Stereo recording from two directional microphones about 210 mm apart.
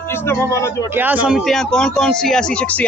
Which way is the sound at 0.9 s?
10° right (ahead or behind).